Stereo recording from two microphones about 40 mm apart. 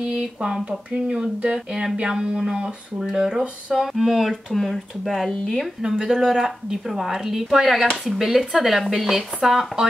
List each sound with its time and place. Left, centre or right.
0.1 s speech: centre
5.8 s speech: centre